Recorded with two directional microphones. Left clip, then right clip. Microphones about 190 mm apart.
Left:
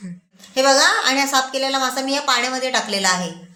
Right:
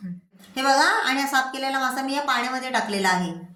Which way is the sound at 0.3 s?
40° left (ahead or behind).